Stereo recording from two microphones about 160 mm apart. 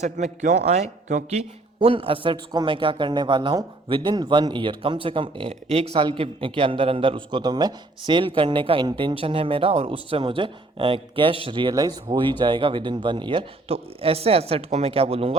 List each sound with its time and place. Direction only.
0.0 s a man's voice: 45° right (ahead or behind)